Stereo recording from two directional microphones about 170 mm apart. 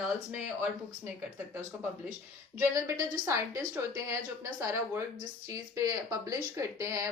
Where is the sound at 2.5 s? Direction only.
15° right (ahead or behind).